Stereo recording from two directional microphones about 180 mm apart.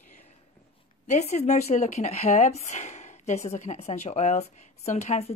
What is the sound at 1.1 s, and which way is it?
Speech, 40° left (ahead or behind).